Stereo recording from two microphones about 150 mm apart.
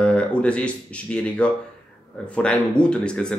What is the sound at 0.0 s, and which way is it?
A man's voice, 10° left (ahead or behind).